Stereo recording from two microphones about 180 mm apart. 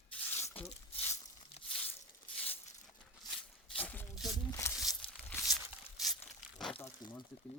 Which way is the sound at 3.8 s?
10° left (ahead or behind).